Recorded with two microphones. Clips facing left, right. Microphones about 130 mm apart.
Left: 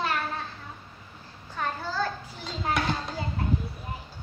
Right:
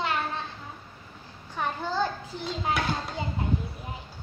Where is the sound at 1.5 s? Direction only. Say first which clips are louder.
Right 2 dB; 15° right (ahead or behind).